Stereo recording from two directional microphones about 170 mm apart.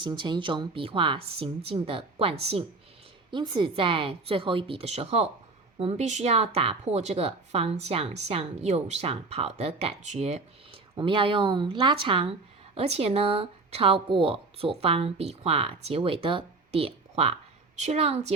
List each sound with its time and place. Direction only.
0.0 s speech: 25° right (ahead or behind)